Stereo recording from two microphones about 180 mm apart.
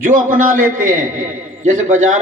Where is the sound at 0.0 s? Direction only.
50° right (ahead or behind).